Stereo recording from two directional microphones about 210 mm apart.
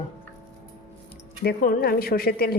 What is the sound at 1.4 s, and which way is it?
Speech, 50° left (ahead or behind).